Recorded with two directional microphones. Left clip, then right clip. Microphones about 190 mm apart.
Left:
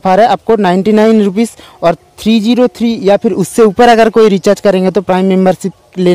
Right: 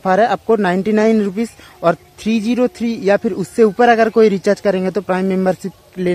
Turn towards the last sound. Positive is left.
turn(degrees=40)  # may be behind; listen again after turning